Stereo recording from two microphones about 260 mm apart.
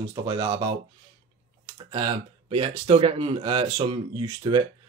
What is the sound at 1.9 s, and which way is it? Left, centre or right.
Speech, right.